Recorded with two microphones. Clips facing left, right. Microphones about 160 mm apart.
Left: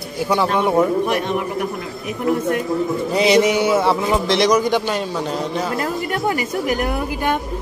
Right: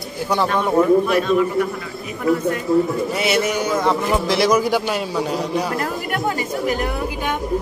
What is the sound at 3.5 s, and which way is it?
A man's voice, 10° left (ahead or behind).